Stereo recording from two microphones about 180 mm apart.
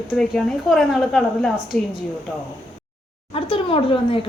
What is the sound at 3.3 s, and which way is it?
Speech, 30° left (ahead or behind).